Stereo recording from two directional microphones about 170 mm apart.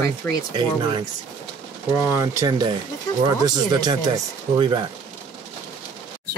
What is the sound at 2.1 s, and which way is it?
Speech, 15° right (ahead or behind).